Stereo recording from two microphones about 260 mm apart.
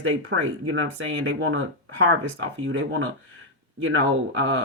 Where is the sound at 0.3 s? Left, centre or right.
Right.